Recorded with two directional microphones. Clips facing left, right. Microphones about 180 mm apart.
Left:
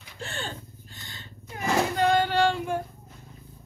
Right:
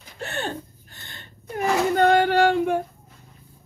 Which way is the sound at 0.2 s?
65° right (ahead or behind).